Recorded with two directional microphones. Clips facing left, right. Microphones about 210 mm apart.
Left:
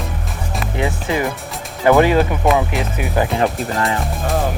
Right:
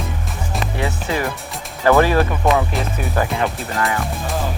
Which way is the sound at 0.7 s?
20° left (ahead or behind).